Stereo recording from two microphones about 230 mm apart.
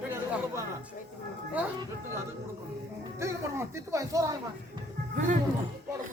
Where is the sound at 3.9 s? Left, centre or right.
Centre.